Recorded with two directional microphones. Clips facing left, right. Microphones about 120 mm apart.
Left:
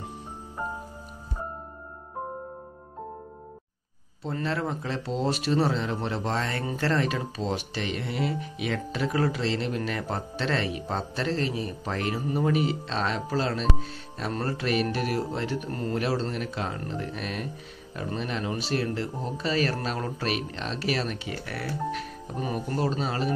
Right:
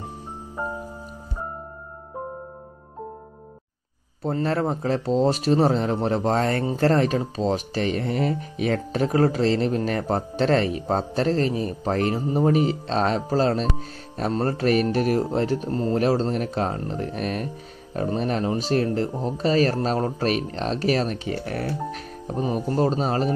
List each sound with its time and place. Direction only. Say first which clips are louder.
4.3 s speech: right 6 dB; 40° right (ahead or behind)
6.6 s speech: right 8 dB; 30° right (ahead or behind)
6.9 s speech: right 4 dB; 40° right (ahead or behind)